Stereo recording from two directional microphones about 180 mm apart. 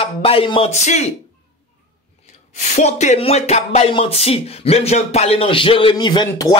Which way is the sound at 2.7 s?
40° left (ahead or behind).